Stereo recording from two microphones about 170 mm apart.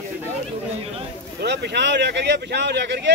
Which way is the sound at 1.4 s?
80° right.